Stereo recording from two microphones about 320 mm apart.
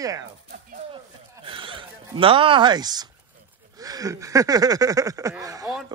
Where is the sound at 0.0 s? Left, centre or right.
Centre.